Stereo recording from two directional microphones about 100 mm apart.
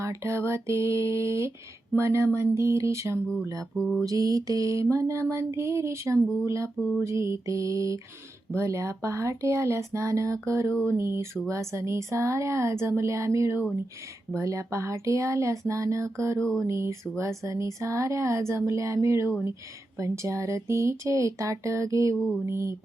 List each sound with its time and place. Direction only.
0.0 s speech: 30° right (ahead or behind)
3.2 s mantra: 5° left (ahead or behind)
4.0 s speech: 35° right (ahead or behind)
16.4 s mantra: 10° left (ahead or behind)
16.6 s speech: 30° right (ahead or behind)